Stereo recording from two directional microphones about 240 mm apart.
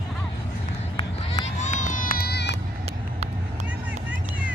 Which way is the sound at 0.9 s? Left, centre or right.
Left.